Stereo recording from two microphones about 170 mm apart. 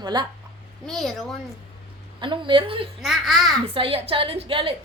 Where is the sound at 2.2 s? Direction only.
30° right (ahead or behind).